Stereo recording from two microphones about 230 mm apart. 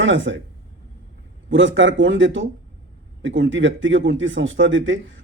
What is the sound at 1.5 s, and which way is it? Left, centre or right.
Speech, right.